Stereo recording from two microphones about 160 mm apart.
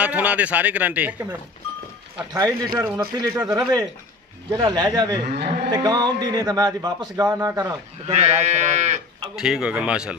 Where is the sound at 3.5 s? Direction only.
20° right (ahead or behind).